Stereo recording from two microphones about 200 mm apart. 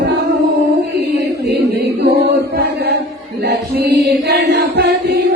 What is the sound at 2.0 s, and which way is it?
Chant, 55° right (ahead or behind).